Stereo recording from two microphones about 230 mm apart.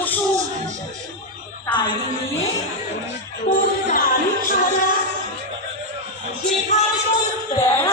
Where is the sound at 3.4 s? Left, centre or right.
Left.